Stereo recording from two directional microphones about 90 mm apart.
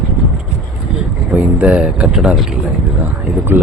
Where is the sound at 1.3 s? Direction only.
15° right (ahead or behind).